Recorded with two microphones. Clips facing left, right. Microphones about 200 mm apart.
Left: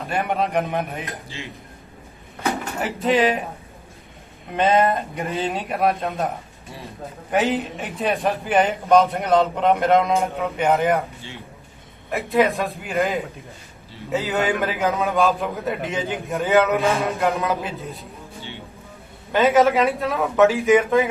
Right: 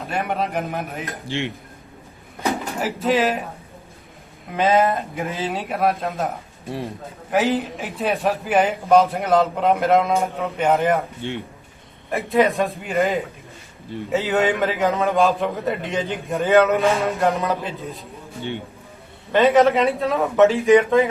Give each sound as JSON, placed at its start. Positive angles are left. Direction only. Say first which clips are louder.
{"t": 0.1, "sound": "a man's voice", "louder": "left 2 dB", "side_deg": 0}
{"t": 1.3, "sound": "speech", "louder": "right 10 dB", "side_deg": -75}
{"t": 2.8, "sound": "a man's voice", "louder": "left 1 dB", "side_deg": 0}
{"t": 4.5, "sound": "a man's voice", "louder": "even", "side_deg": 0}
{"t": 11.2, "sound": "a man's voice", "louder": "right 10 dB", "side_deg": -60}
{"t": 12.1, "sound": "a man's voice", "louder": "right 1 dB", "side_deg": 0}
{"t": 19.3, "sound": "a man's voice", "louder": "right 1 dB", "side_deg": 0}